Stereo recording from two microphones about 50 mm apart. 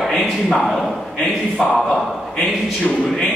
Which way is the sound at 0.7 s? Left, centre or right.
Centre.